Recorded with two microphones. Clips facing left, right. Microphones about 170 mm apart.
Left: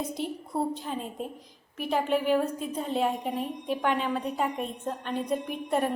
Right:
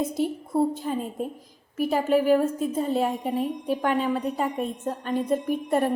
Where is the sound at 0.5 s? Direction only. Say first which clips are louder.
Right 7 dB; centre (ahead or behind).